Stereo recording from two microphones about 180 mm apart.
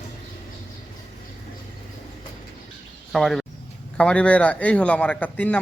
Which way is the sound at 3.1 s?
Centre (ahead or behind).